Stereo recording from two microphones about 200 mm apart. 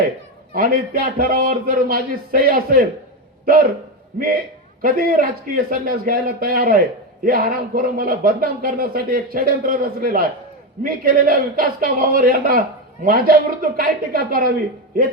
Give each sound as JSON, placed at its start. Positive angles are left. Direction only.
{"t": 0.5, "sound": "a man's voice", "side_deg": -45}
{"t": 4.1, "sound": "a man's voice", "side_deg": -45}